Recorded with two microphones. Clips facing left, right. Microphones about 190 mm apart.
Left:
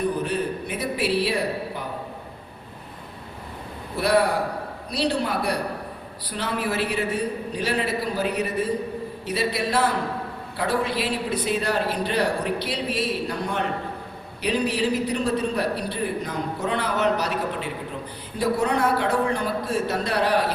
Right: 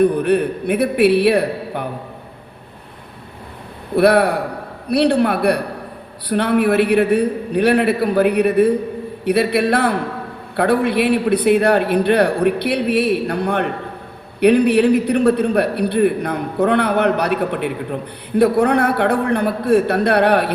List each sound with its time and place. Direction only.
0.0 s a man's voice: 60° right (ahead or behind)
3.9 s a man's voice: 60° right (ahead or behind)